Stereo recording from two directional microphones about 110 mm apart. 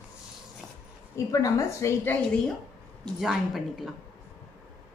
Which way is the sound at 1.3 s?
30° left (ahead or behind).